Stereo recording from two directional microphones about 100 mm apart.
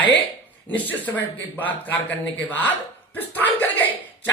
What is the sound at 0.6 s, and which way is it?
Speech, 15° left (ahead or behind).